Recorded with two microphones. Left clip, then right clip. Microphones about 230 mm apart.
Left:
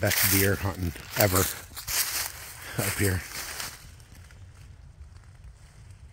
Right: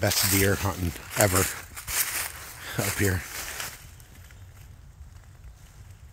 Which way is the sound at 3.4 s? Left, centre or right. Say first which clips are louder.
Right 1 dB; centre.